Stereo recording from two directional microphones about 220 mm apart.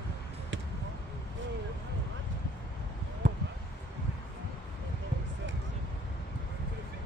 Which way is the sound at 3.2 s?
35° right (ahead or behind).